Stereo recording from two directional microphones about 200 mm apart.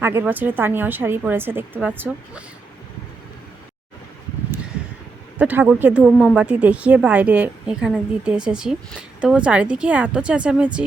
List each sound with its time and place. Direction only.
0.0 s a woman's voice: 10° right (ahead or behind)
5.4 s a woman's voice: 5° right (ahead or behind)